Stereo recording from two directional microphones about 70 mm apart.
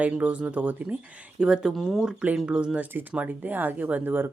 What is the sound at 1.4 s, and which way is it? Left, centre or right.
Speech, centre.